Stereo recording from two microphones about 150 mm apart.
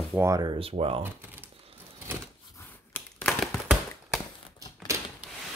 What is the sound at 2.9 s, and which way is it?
Tap, 5° left (ahead or behind).